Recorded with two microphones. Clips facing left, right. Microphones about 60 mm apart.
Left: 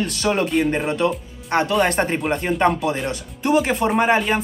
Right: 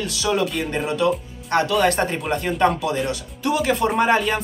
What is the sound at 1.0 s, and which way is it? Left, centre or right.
A man's voice, left.